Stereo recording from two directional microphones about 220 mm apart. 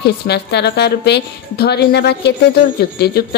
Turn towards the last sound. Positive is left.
turn(degrees=45)  # may be behind; listen again after turning